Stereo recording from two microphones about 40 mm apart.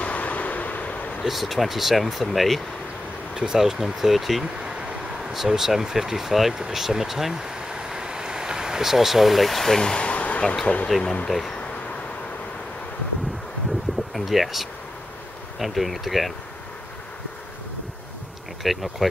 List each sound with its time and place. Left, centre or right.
0.0 s vehicle: left
1.2 s speech: centre
3.3 s speech: centre
9.9 s a sound: left
10.4 s speech: centre
14.1 s speech: centre
18.6 s speech: centre